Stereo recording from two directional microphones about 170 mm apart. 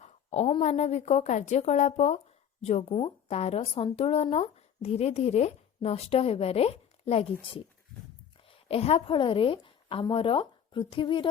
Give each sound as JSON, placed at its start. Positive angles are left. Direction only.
{"t": 0.0, "sound": "a woman's voice", "side_deg": 40}